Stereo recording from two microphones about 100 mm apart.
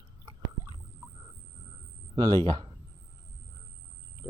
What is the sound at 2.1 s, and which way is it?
Speech, 40° right (ahead or behind).